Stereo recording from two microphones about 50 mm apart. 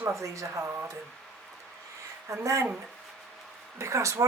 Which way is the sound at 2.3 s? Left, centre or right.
Right.